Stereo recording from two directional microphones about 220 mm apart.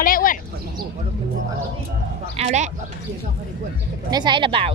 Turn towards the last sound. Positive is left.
turn(degrees=-25)  # may be behind; listen again after turning